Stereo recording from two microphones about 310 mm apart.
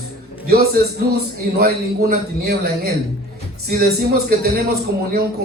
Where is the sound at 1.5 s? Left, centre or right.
Right.